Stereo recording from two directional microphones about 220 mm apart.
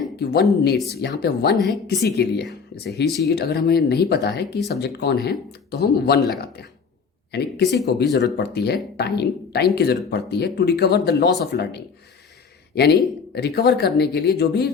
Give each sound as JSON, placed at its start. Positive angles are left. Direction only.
{"t": 0.2, "sound": "speech", "side_deg": 50}
{"t": 1.5, "sound": "a woman's voice", "side_deg": 0}
{"t": 2.0, "sound": "speech", "side_deg": 50}
{"t": 7.6, "sound": "speech", "side_deg": 50}